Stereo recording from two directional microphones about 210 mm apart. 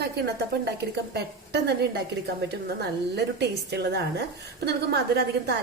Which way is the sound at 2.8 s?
55° right (ahead or behind).